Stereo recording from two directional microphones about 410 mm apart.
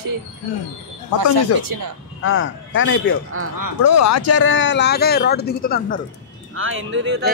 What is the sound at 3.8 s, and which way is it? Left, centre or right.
Speech, left.